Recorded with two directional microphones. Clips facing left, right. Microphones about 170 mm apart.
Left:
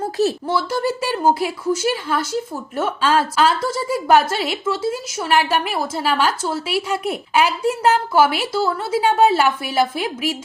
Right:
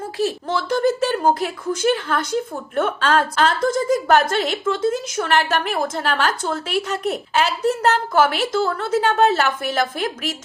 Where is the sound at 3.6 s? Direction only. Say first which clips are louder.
Right 4 dB; 50° right (ahead or behind).